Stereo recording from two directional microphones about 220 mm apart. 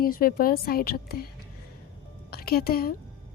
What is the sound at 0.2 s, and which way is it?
A woman's voice, 40° left (ahead or behind).